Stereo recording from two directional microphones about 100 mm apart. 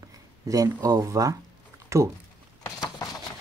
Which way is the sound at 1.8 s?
30° right (ahead or behind).